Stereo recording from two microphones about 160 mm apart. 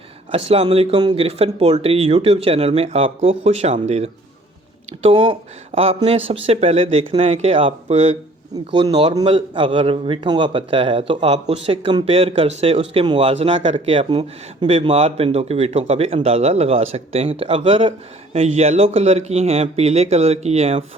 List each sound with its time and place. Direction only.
0.3 s a man's voice: 40° right (ahead or behind)
8.7 s a man's voice: 30° right (ahead or behind)
14.7 s a man's voice: 40° right (ahead or behind)